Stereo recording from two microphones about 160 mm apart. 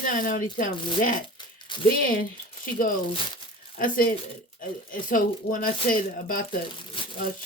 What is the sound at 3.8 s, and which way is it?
Speech, 60° left (ahead or behind).